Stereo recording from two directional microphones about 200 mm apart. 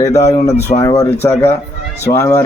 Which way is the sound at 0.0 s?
15° left (ahead or behind).